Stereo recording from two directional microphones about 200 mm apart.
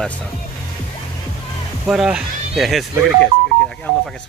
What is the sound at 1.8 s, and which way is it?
Speech, 5° right (ahead or behind).